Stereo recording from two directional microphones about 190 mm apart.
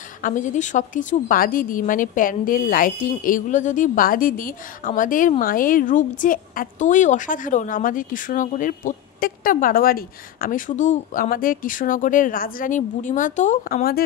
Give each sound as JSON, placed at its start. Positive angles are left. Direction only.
{"t": 0.2, "sound": "speech", "side_deg": 40}